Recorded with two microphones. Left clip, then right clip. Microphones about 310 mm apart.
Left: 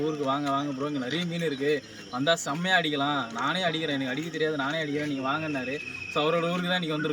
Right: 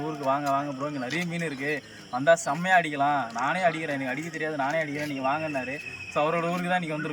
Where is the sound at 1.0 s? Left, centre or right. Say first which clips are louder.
Right 1 dB; right.